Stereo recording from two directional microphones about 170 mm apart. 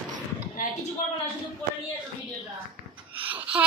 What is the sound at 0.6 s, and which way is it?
Speech, 55° left (ahead or behind).